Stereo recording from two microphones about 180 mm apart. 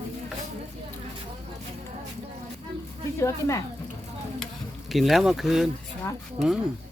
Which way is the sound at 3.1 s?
15° left (ahead or behind).